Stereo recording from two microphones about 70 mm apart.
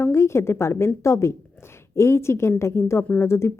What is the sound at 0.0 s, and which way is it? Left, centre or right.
A woman's voice, left.